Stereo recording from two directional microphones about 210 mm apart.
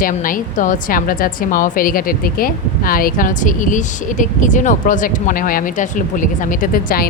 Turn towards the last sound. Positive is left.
turn(degrees=40)  # may be behind; listen again after turning